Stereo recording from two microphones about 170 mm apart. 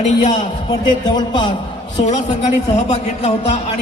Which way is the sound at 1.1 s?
30° left (ahead or behind).